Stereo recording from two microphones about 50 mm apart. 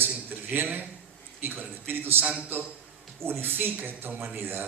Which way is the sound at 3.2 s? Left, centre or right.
Right.